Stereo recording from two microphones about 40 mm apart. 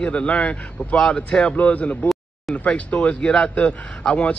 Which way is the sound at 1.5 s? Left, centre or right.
Left.